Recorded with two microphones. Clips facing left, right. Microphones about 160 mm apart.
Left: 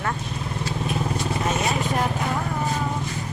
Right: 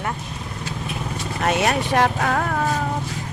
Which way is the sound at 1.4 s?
85° right.